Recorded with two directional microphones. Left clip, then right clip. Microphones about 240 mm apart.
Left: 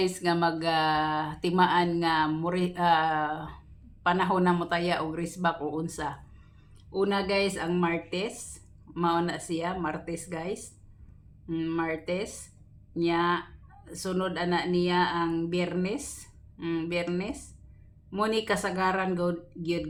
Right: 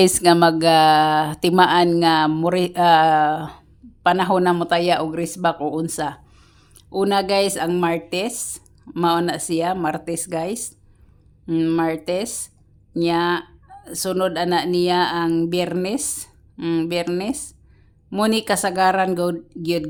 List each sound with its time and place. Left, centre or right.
0.0 s speech: right